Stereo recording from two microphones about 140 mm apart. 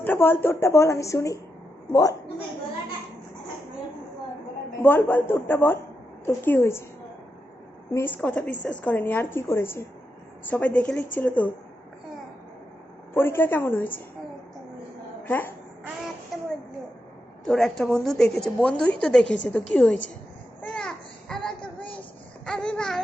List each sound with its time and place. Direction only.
0.0 s a woman's voice: 15° left (ahead or behind)
4.8 s a woman's voice: 15° left (ahead or behind)
7.9 s a woman's voice: 15° left (ahead or behind)
13.1 s a woman's voice: 15° left (ahead or behind)
15.2 s speech: 15° left (ahead or behind)
16.3 s a sound: centre (ahead or behind)
17.4 s a woman's voice: 5° left (ahead or behind)
20.6 s a sound: 5° left (ahead or behind)
22.4 s babbling: 5° left (ahead or behind)